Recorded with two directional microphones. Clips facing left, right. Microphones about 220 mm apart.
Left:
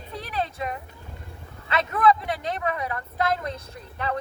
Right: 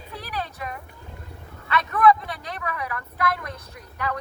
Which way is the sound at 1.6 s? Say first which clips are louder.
Right 2 dB; 25° left (ahead or behind).